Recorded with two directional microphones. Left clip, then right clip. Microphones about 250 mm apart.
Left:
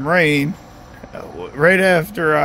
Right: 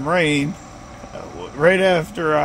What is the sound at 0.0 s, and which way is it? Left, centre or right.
Speech, left.